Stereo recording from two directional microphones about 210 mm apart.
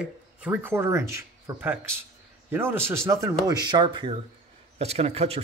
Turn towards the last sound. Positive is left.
turn(degrees=-30)  # may be behind; listen again after turning